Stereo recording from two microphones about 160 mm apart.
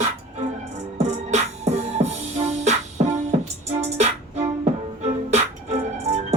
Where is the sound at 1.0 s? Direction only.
45° right (ahead or behind).